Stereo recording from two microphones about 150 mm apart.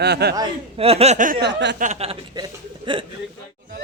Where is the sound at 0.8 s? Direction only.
40° right (ahead or behind); by 1.9 s 60° right (ahead or behind).